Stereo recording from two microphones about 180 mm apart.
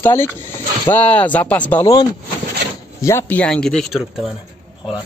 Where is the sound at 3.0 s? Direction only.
10° left (ahead or behind).